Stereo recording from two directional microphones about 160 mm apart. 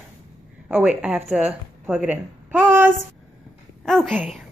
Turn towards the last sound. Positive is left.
turn(degrees=5)  # may be behind; listen again after turning